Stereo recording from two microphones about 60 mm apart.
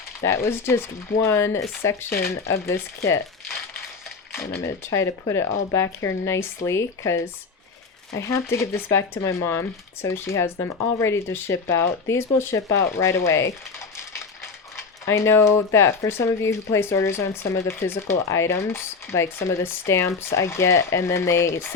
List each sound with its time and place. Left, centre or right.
0.2 s speech: left
4.4 s speech: left
8.3 s speech: left